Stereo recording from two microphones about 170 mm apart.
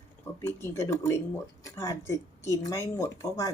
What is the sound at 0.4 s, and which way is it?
A woman's voice, 15° left (ahead or behind).